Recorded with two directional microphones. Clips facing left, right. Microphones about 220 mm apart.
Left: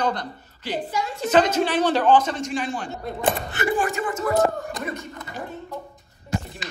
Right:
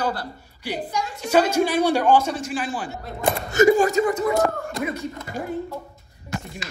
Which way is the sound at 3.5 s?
40° right (ahead or behind).